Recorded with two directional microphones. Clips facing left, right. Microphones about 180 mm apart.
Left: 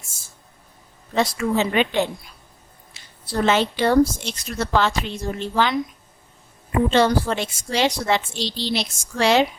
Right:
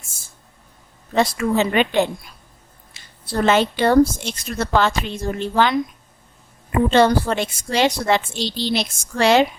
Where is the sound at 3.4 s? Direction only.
50° right (ahead or behind).